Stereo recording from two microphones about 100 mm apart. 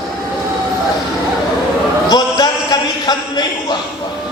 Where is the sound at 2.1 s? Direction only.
45° left (ahead or behind).